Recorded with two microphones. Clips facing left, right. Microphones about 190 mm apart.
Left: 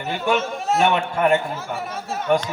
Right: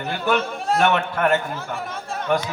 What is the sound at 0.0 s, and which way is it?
A man's voice, 5° left (ahead or behind).